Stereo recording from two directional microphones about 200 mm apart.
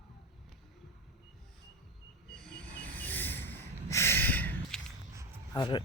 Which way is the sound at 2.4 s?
10° left (ahead or behind).